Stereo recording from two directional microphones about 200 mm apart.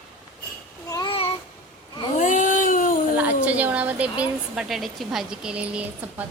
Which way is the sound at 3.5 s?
5° right (ahead or behind).